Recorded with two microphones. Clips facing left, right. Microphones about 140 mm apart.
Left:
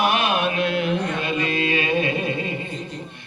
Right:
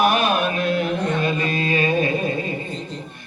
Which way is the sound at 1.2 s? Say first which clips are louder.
Right 1 dB; 40° right (ahead or behind).